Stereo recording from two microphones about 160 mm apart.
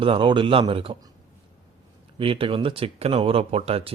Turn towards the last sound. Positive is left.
turn(degrees=-40)  # may be behind; listen again after turning